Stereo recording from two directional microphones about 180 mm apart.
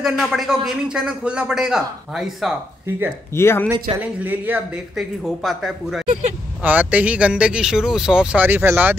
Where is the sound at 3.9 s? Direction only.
10° right (ahead or behind).